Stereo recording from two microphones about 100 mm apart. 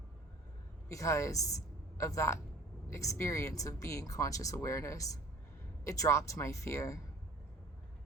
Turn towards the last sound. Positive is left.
turn(degrees=30)  # may be behind; listen again after turning